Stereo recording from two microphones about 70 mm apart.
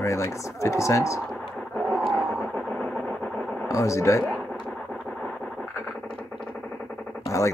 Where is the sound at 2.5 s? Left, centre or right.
Centre.